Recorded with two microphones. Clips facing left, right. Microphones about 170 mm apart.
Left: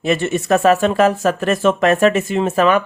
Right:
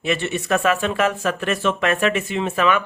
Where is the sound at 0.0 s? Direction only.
40° left (ahead or behind).